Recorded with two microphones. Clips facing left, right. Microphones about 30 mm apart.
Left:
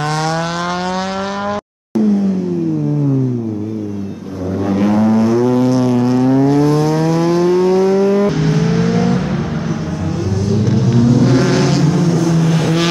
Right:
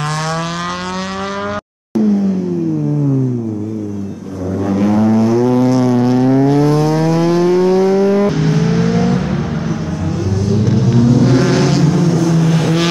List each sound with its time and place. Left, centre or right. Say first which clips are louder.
0.0 s vehicle: left 2 dB; centre
4.6 s vehicle: even; left
5.2 s vehicle: right 1 dB; centre
5.9 s vehicle: right 1 dB; right
8.3 s vehicle: even; centre